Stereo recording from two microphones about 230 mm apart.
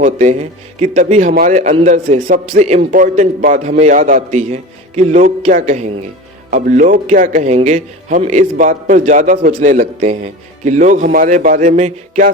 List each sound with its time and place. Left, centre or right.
0.0 s a man's voice: right